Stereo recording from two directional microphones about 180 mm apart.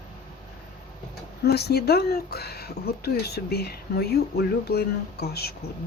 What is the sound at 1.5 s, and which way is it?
Speech, 65° left (ahead or behind).